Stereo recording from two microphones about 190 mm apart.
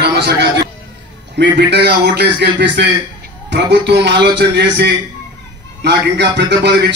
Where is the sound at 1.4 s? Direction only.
65° right (ahead or behind).